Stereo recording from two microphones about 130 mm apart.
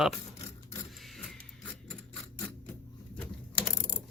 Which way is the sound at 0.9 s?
Centre (ahead or behind).